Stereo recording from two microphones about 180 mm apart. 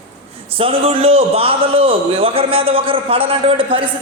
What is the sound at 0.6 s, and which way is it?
A man's voice, 30° right (ahead or behind).